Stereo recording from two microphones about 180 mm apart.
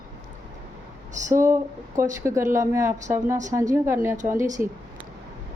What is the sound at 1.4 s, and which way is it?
Speech, 15° right (ahead or behind).